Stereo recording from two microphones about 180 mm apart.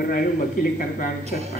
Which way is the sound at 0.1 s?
50° left (ahead or behind).